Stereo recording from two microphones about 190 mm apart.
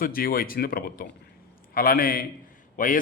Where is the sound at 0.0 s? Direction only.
50° left (ahead or behind).